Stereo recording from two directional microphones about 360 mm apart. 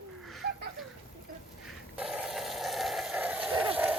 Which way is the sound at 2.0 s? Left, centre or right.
Centre.